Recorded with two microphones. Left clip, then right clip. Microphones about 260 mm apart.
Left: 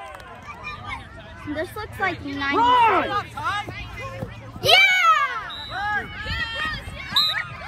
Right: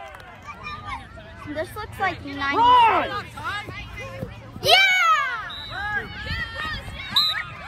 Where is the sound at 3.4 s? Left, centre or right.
Centre.